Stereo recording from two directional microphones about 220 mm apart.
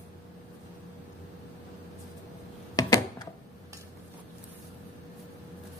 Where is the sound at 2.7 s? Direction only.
15° left (ahead or behind).